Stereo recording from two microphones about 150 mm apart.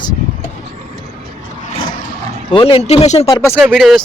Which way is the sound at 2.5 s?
40° left (ahead or behind).